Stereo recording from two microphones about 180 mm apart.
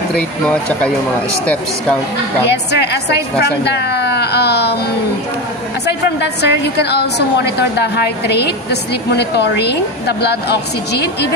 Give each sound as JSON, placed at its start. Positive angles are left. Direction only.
{"t": 1.4, "sound": "speech", "side_deg": 5}
{"t": 2.4, "sound": "a woman's voice", "side_deg": 70}
{"t": 3.6, "sound": "baby cry", "side_deg": 65}
{"t": 5.9, "sound": "a woman's voice", "side_deg": 70}